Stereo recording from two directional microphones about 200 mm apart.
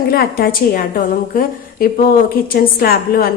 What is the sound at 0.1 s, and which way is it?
A woman's voice, 50° left (ahead or behind).